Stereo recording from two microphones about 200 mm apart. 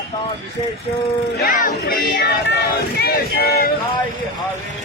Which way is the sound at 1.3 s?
45° left (ahead or behind).